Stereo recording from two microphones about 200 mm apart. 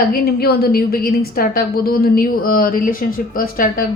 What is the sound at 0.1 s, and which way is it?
A woman's voice, 50° left (ahead or behind).